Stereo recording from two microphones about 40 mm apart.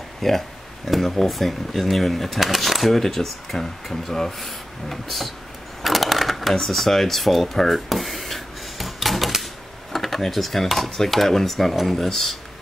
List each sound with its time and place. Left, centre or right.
0.2 s speech: centre
5.8 s a sound: centre
6.5 s speech: centre